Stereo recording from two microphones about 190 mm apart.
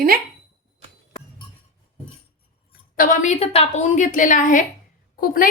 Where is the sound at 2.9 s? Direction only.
45° left (ahead or behind).